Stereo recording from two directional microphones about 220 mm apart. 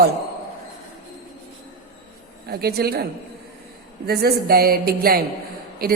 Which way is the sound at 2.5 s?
45° right (ahead or behind).